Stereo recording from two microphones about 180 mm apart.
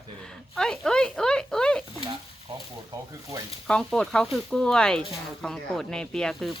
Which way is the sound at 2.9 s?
15° right (ahead or behind).